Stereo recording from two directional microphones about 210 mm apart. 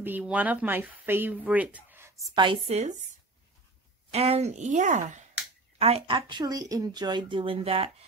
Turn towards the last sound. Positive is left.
turn(degrees=-25)  # may be behind; listen again after turning